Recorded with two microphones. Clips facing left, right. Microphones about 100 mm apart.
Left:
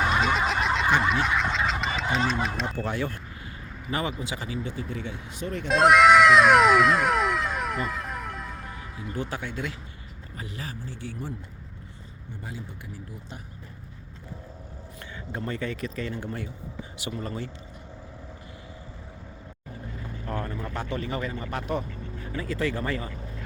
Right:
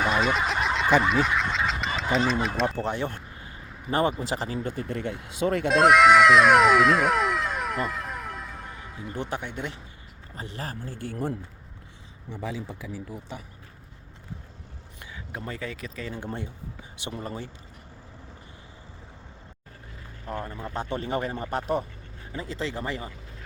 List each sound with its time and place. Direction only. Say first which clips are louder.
0.1 s fowl: even; centre (ahead or behind)
2.7 s a sound: right 1 dB; 20° right (ahead or behind); by 4.1 s 35° right (ahead or behind)
4.3 s speech: right 3 dB; 40° right (ahead or behind); by 5.6 s 70° right (ahead or behind)
5.6 s cat: even; centre (ahead or behind)
9.1 s speech: even; 20° right (ahead or behind)
10.3 s a man's voice: right 2 dB; 30° right (ahead or behind); by 11.3 s 50° right (ahead or behind)
12.3 s speech: right 6 dB; 90° right
15.3 s speech: left 4 dB; 5° right (ahead or behind)
16.2 s speech: even; 20° right (ahead or behind)
20.2 s a sound: left 1 dB; 15° right (ahead or behind)
20.7 s speech: right 1 dB; 30° right (ahead or behind)
22.3 s speech: left 3 dB; 25° right (ahead or behind)